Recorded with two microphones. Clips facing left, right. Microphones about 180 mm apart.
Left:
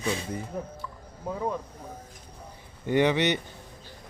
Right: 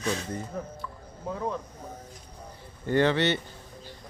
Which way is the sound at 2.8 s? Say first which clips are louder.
Even; 15° left (ahead or behind).